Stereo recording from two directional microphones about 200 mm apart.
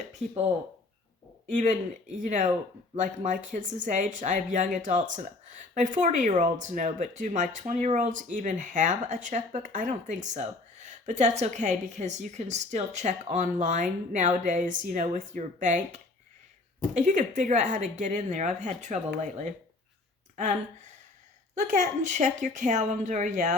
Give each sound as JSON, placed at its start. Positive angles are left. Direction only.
{"t": 1.5, "sound": "speech", "side_deg": -40}
{"t": 20.3, "sound": "speech", "side_deg": -35}